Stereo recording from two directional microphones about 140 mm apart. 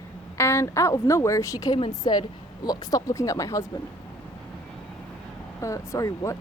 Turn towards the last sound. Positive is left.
turn(degrees=20)  # may be behind; listen again after turning